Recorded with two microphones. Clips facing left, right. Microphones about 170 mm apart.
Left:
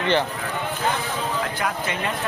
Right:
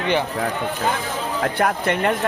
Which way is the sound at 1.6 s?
60° right (ahead or behind).